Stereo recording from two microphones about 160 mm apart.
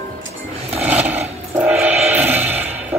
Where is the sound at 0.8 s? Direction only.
10° right (ahead or behind).